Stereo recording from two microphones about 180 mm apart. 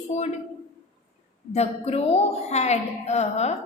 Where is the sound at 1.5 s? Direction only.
35° left (ahead or behind).